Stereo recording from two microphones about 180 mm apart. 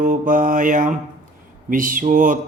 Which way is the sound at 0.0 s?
50° right (ahead or behind).